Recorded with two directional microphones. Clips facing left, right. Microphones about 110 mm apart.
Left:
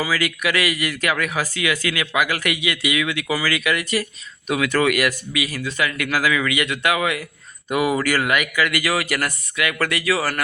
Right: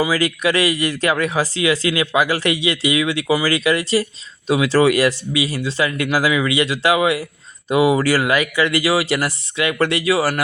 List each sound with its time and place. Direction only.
0.1 s speech: 35° right (ahead or behind)